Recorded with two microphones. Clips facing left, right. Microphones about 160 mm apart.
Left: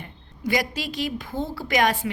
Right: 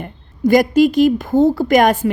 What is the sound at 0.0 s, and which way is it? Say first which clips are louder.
A woman's voice: right 13 dB; 50° right (ahead or behind).